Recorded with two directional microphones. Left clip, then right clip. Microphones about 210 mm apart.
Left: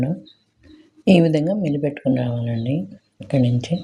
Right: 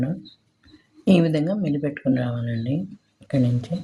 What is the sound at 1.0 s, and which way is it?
Speech, 15° left (ahead or behind).